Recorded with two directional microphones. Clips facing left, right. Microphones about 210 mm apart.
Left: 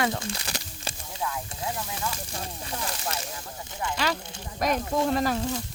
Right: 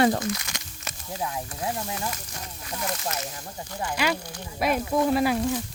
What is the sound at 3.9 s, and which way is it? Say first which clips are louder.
Speech: right 3 dB; 10° right (ahead or behind).